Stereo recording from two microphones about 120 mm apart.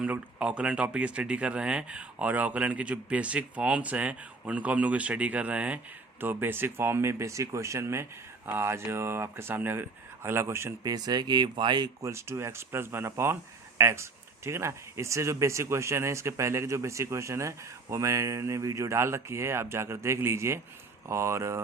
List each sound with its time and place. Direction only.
0.0 s speech: 10° right (ahead or behind)
10.9 s speech: 35° right (ahead or behind)
12.0 s speech: 25° right (ahead or behind)